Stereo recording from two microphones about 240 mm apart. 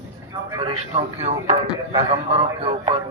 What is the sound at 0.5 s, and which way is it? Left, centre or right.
A man's voice, right.